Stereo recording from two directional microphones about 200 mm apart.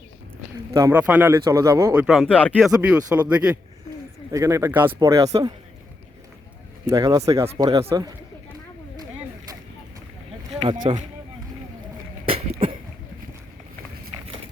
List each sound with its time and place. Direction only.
0.7 s speech: 15° right (ahead or behind)
6.9 s speech: 15° right (ahead or behind)
10.8 s speech: 25° right (ahead or behind)
12.2 s a sound: 25° right (ahead or behind)